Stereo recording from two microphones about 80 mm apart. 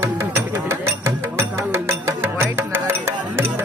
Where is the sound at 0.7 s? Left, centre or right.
Right.